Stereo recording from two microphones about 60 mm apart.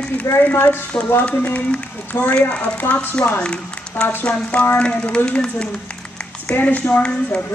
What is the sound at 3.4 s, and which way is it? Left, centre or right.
Speech, centre.